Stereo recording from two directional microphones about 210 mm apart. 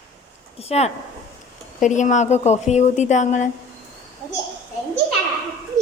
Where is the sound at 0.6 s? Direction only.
30° left (ahead or behind).